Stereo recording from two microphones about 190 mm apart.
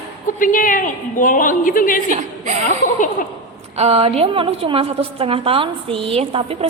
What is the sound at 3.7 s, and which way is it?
A woman's voice, 30° right (ahead or behind).